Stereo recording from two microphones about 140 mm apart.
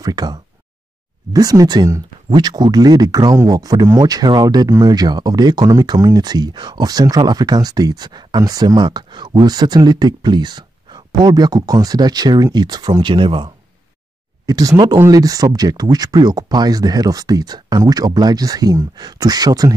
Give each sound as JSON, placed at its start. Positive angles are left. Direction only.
{"t": 0.0, "sound": "speech", "side_deg": -30}